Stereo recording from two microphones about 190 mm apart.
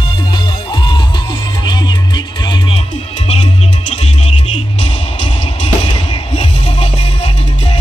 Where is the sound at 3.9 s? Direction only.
35° left (ahead or behind).